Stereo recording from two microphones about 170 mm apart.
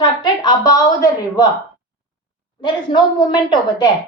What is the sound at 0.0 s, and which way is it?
A woman's voice, 25° left (ahead or behind).